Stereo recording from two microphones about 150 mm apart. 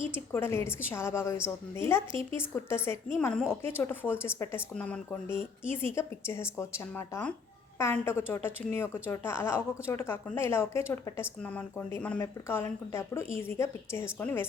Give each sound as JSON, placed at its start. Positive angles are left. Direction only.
{"t": 0.1, "sound": "a woman's voice", "side_deg": 15}